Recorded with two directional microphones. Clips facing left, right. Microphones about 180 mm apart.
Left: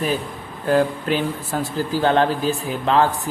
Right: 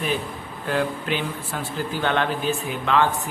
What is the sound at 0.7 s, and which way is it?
Speech, 40° left (ahead or behind).